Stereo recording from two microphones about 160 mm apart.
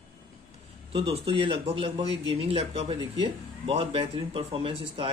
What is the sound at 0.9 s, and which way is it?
Speech, 35° right (ahead or behind).